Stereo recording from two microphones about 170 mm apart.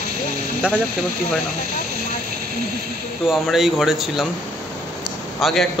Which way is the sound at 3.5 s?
Centre (ahead or behind).